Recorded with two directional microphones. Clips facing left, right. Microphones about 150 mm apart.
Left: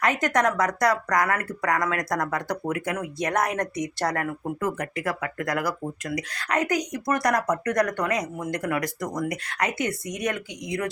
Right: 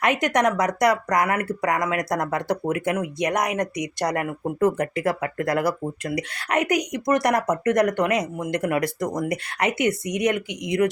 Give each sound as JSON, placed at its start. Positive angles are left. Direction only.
{"t": 0.0, "sound": "speech", "side_deg": -20}
{"t": 4.6, "sound": "speech", "side_deg": -30}